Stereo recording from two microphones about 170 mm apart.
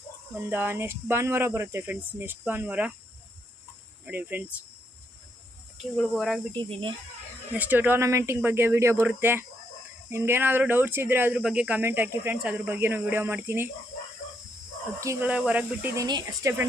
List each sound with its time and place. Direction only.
0.3 s speech: 15° right (ahead or behind)
4.0 s speech: 10° right (ahead or behind)
5.7 s cricket: centre (ahead or behind)
6.5 s speech: 30° right (ahead or behind)
7.5 s speech: 10° right (ahead or behind)
15.0 s speech: 15° right (ahead or behind)
16.0 s speech: 20° right (ahead or behind)